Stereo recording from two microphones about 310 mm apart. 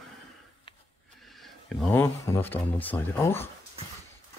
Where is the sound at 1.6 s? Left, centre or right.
Centre.